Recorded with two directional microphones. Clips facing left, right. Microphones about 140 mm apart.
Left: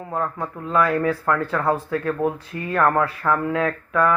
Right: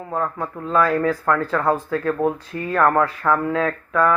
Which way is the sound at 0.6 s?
30° right (ahead or behind).